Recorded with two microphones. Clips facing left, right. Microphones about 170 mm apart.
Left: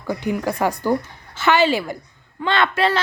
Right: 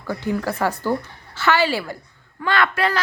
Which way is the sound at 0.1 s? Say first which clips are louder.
Left 1 dB; 15° left (ahead or behind).